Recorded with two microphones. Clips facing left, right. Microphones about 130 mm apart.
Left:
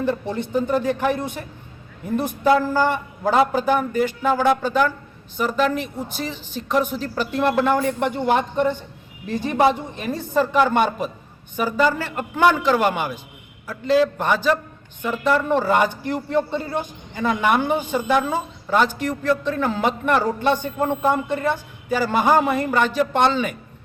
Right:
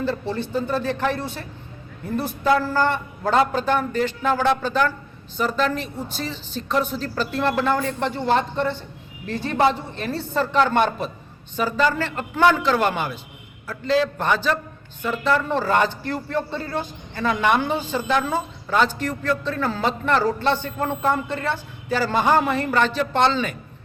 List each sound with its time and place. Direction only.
0.0 s speech: 15° left (ahead or behind)